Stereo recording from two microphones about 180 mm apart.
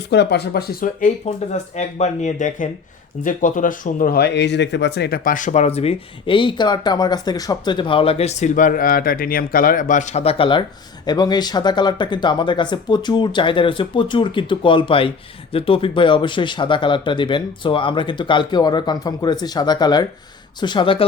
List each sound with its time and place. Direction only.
0.1 s speech: 70° left (ahead or behind); by 21.1 s 30° left (ahead or behind)